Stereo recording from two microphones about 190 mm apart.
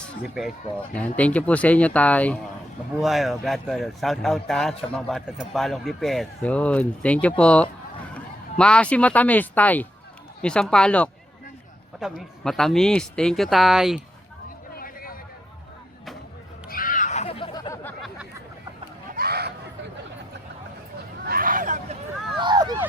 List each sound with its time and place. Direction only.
0.9 s speech: 5° left (ahead or behind)
14.8 s a sound: 50° left (ahead or behind)
16.6 s music: 45° left (ahead or behind); by 17.7 s 25° left (ahead or behind)
19.1 s a sound: 55° right (ahead or behind)
21.2 s hubbub: 50° right (ahead or behind)
22.4 s vehicle: 20° right (ahead or behind)